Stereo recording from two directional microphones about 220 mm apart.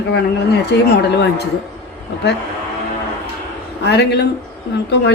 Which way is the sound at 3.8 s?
50° left (ahead or behind).